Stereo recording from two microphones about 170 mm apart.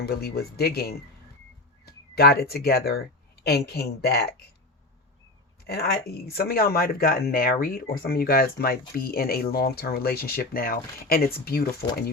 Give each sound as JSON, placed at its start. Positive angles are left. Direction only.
{"t": 0.0, "sound": "speech", "side_deg": 65}
{"t": 5.6, "sound": "speech", "side_deg": 70}